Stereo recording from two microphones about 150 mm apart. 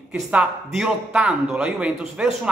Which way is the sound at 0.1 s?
10° right (ahead or behind).